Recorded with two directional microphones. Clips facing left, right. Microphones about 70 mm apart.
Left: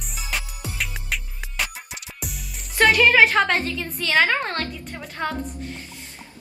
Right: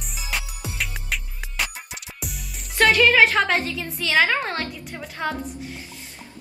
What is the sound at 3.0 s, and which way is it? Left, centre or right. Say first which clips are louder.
A woman's voice: left 1 dB; centre.